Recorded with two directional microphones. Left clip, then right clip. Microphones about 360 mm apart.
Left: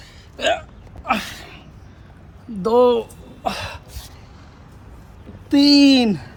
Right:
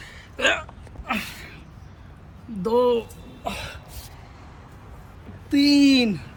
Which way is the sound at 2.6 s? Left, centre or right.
Centre.